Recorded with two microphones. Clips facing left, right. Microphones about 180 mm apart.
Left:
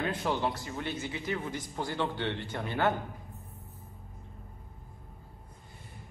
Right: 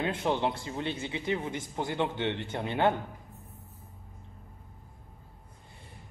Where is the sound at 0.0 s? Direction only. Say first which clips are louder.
Right 2 dB; 25° right (ahead or behind).